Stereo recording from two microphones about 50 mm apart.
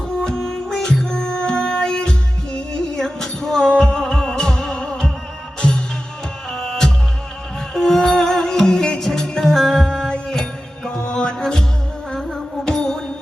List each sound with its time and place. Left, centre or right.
0.2 s music: centre